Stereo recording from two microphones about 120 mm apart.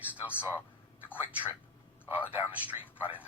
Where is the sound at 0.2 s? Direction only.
10° right (ahead or behind).